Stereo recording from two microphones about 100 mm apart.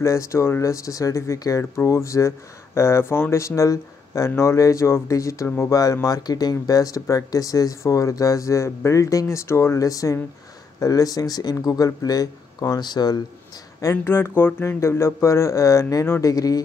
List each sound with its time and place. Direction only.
0.0 s speech: 30° left (ahead or behind)
13.7 s speech: 25° left (ahead or behind)